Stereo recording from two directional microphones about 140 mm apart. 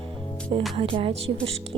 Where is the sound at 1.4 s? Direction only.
45° right (ahead or behind).